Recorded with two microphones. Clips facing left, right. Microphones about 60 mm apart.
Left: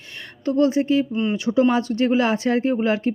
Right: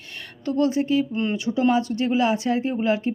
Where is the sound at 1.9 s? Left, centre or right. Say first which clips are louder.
Left 2 dB; left.